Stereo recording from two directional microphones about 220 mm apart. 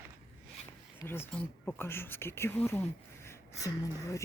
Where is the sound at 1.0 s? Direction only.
10° left (ahead or behind).